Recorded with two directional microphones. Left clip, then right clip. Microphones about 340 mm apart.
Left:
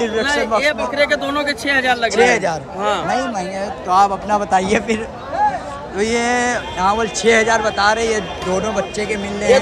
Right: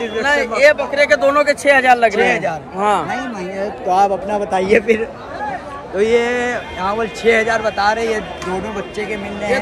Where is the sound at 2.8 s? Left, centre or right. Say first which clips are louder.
Right 4 dB; centre.